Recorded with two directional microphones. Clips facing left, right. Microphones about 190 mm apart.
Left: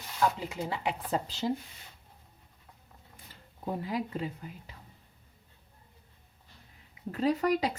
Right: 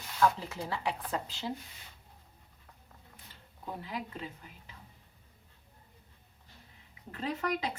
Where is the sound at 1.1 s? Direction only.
40° left (ahead or behind).